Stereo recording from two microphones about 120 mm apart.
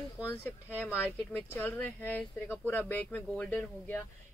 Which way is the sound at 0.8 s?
15° left (ahead or behind).